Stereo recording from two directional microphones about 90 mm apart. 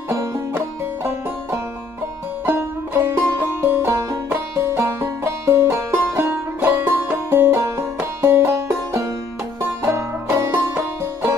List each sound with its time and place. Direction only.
2.4 s music: 25° right (ahead or behind)